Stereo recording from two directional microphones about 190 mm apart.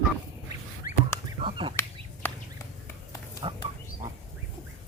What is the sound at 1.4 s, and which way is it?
Finger snapping, 25° right (ahead or behind).